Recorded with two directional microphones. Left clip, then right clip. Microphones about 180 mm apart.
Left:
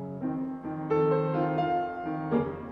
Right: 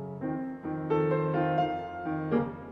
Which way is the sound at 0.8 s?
35° right (ahead or behind).